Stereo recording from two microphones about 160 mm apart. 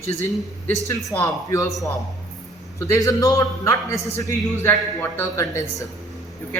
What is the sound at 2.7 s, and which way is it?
A man's voice, 20° left (ahead or behind).